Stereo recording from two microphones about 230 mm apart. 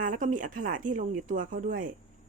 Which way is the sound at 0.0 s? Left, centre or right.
Right.